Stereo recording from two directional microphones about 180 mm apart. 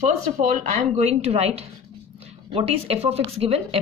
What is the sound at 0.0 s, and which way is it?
Speech, 35° right (ahead or behind).